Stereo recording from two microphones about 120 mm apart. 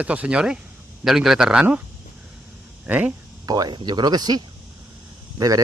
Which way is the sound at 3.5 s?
35° right (ahead or behind).